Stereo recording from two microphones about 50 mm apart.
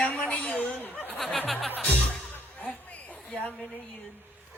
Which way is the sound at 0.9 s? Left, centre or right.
Left.